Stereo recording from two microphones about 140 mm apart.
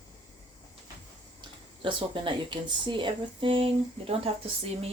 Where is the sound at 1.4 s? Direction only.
40° right (ahead or behind).